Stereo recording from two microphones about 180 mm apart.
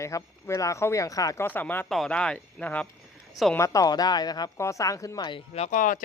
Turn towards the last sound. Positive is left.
turn(degrees=45)  # may be behind; listen again after turning